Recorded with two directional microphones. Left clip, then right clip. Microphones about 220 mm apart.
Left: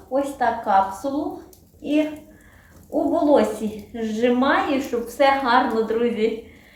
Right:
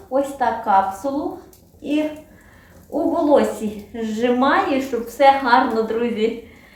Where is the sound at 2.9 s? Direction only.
Centre (ahead or behind).